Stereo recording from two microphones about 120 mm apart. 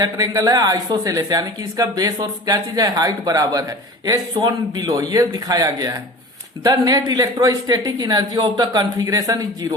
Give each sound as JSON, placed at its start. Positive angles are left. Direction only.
{"t": 0.0, "sound": "speech", "side_deg": -30}